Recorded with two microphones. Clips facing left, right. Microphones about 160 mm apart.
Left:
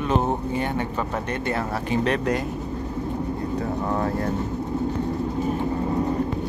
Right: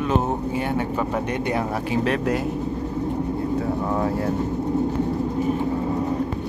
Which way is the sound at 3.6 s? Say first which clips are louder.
Even; 5° right (ahead or behind).